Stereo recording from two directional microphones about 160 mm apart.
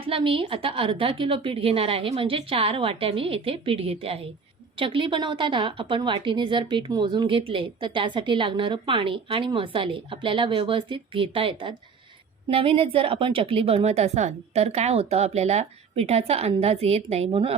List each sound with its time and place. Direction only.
0.0 s a woman's voice: 35° right (ahead or behind)